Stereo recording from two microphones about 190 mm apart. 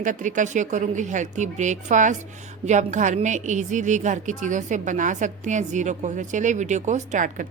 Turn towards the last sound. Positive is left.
turn(degrees=-40)  # may be behind; listen again after turning